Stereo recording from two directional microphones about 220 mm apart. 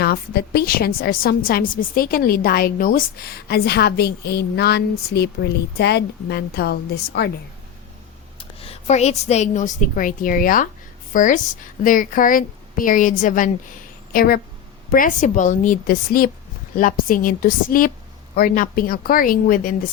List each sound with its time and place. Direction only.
0.0 s a woman's voice: 45° left (ahead or behind)
8.4 s a woman's voice: 25° left (ahead or behind)